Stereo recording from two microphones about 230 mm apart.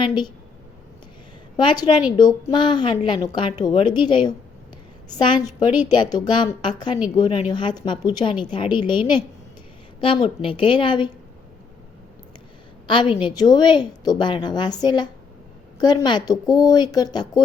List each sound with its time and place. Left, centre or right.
0.0 s a woman's voice: centre
1.5 s a woman's voice: centre
12.9 s a woman's voice: left